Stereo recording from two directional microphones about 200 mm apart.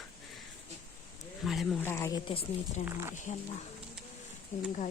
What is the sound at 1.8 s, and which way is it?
Speech, 15° left (ahead or behind).